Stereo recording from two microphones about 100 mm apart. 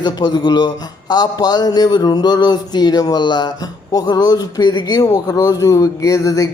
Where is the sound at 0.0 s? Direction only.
45° left (ahead or behind).